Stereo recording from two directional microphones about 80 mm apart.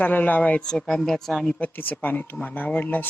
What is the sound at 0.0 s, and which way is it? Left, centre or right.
Speech, left.